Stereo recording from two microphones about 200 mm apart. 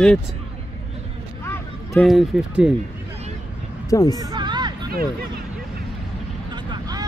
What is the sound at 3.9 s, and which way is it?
Speech, 15° left (ahead or behind).